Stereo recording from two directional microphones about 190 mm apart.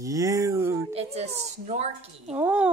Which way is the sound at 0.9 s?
35° right (ahead or behind).